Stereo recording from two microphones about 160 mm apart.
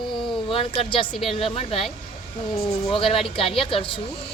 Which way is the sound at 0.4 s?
35° left (ahead or behind).